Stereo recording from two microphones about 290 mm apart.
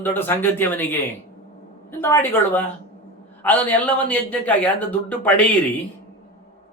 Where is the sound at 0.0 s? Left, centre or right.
Centre.